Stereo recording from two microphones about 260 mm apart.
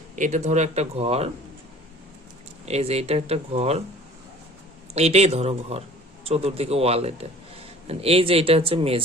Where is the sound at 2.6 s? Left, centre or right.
Right.